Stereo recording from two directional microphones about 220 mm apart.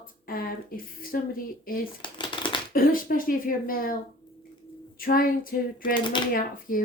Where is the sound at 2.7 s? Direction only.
40° left (ahead or behind).